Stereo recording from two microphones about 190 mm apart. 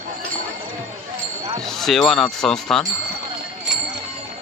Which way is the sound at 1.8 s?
Centre (ahead or behind).